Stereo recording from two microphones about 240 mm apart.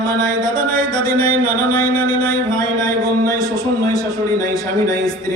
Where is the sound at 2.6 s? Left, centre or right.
Centre.